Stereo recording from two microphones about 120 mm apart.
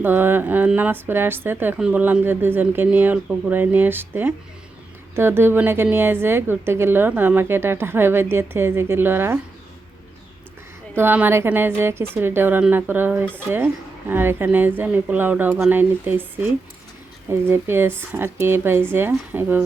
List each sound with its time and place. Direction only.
0.0 s a woman's voice: 15° right (ahead or behind)
10.9 s a woman's voice: 15° right (ahead or behind)